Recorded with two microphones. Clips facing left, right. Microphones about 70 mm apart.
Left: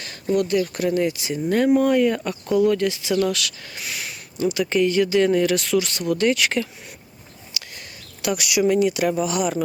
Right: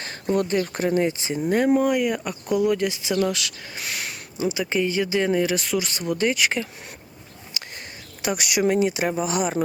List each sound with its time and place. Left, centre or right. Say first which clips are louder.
0.0 s speech: left 2 dB; right
3.8 s speech: right 1 dB; right
4.4 s speech: left 3 dB; centre
7.6 s a sound: even; right
8.2 s speech: left 2 dB; right
8.8 s speech: left 2 dB; right